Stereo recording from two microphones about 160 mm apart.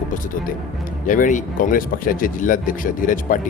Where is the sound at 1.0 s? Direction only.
55° left (ahead or behind).